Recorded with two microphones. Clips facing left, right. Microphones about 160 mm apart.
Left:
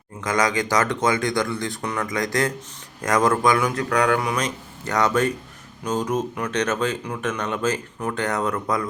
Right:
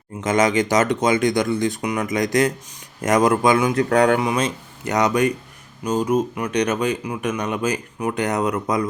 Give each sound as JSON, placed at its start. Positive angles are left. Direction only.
{"t": 0.2, "sound": "speech", "side_deg": -25}